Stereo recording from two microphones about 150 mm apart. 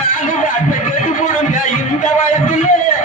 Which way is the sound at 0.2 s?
60° left (ahead or behind).